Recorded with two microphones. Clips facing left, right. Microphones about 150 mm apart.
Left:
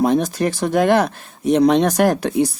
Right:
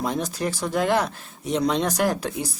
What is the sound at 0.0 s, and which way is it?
Speech, 65° left (ahead or behind).